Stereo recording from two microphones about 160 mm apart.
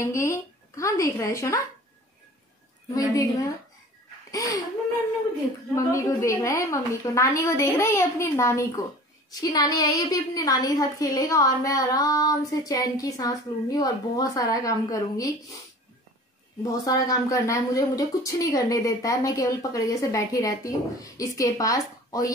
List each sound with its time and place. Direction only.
0.0 s a woman's voice: 20° left (ahead or behind)
2.9 s a woman's voice: 20° left (ahead or behind)
4.3 s a woman's voice: 20° left (ahead or behind)
5.8 s a woman's voice: 20° left (ahead or behind)
16.6 s a woman's voice: 20° left (ahead or behind)